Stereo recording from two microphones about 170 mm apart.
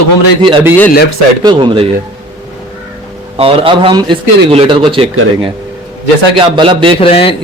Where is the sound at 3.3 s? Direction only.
35° right (ahead or behind).